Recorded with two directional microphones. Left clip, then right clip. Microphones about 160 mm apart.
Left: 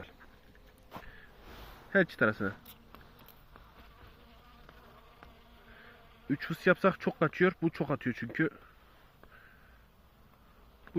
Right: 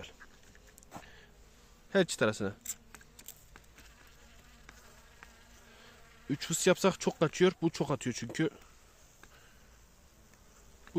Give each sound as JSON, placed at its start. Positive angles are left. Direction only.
{"t": 1.9, "sound": "speech", "side_deg": -20}
{"t": 6.2, "sound": "speech", "side_deg": -30}